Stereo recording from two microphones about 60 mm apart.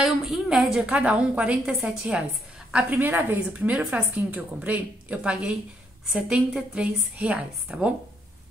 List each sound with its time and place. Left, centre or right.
0.0 s a woman's voice: centre
0.8 s a woman's voice: right
1.7 s a woman's voice: centre
2.7 s a woman's voice: right